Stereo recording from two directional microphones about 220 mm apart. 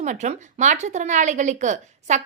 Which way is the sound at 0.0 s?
35° right (ahead or behind).